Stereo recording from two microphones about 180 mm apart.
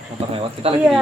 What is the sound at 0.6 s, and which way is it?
Speech, 35° right (ahead or behind).